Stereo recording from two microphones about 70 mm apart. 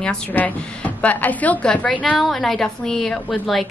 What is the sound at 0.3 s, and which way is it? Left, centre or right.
A woman's voice, left.